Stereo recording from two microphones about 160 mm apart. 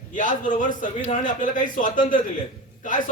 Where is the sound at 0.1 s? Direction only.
55° left (ahead or behind).